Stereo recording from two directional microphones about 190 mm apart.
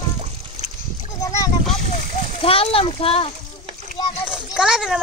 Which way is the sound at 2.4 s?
30° left (ahead or behind).